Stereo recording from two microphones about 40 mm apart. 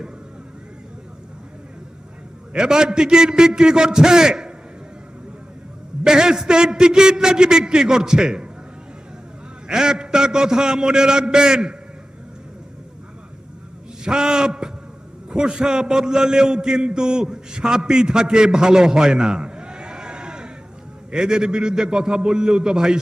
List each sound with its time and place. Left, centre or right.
2.5 s a man's voice: centre
6.0 s a man's voice: centre
9.6 s a man's voice: centre
14.0 s a sound: centre
15.3 s a man's voice: centre